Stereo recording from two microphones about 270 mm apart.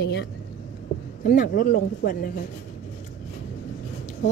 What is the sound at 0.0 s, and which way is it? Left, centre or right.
A woman's voice, left.